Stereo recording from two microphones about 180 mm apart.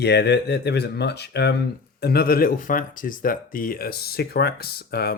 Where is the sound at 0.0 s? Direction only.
65° left (ahead or behind).